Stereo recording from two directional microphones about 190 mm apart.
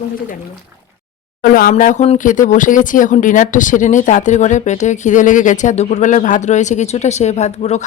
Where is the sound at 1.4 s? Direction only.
50° left (ahead or behind).